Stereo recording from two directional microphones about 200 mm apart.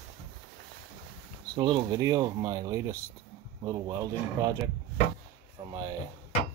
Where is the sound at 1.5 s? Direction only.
20° right (ahead or behind).